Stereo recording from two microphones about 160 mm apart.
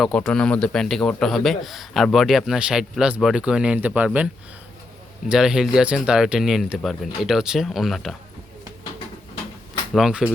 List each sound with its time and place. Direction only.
0.0 s a man's voice: 5° left (ahead or behind)
5.3 s a man's voice: 5° right (ahead or behind)
9.9 s a man's voice: 5° right (ahead or behind)